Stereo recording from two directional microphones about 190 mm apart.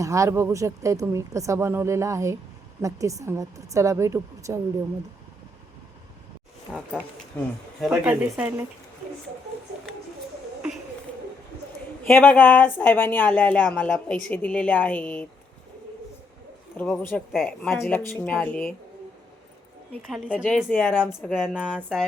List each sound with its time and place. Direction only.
0.0 s speech: 15° right (ahead or behind)
6.7 s speech: 5° right (ahead or behind)
7.3 s speech: 5° left (ahead or behind)
7.8 s speech: 5° right (ahead or behind)
12.0 s speech: 5° left (ahead or behind)
16.7 s speech: 10° left (ahead or behind)
20.1 s speech: 5° left (ahead or behind)